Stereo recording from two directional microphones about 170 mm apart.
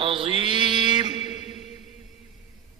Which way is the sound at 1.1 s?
40° left (ahead or behind).